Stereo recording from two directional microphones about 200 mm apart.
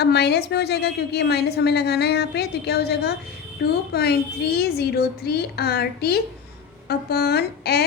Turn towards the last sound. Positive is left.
turn(degrees=55)  # may be behind; listen again after turning